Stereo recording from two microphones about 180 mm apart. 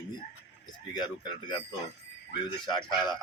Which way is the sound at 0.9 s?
25° left (ahead or behind).